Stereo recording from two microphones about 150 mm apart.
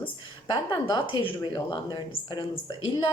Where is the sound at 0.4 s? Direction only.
30° left (ahead or behind).